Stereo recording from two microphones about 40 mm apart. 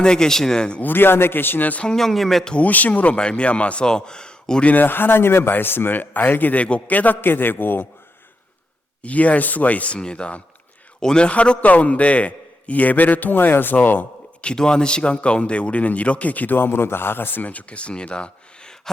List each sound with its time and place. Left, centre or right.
0.0 s speech: centre
0.8 s speech: left
2.0 s speech: centre
2.6 s speech: left
3.2 s speech: left
3.8 s speech: centre
4.8 s a man's voice: left
9.0 s speech: left
10.0 s a man's voice: left
11.3 s a man's voice: left
14.4 s speech: centre; by 16.6 s left
16.6 s speech: left